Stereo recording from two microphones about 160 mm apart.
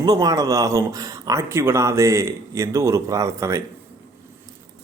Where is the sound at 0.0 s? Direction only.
25° right (ahead or behind).